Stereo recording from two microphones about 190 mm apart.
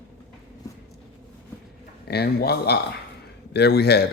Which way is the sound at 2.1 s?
55° left (ahead or behind).